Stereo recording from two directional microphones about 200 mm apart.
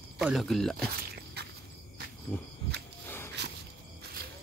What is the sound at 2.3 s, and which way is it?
Speech, 10° left (ahead or behind).